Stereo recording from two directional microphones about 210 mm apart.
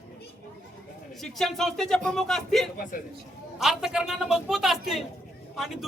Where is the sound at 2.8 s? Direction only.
40° left (ahead or behind).